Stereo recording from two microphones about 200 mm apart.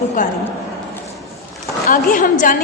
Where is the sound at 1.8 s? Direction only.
45° left (ahead or behind).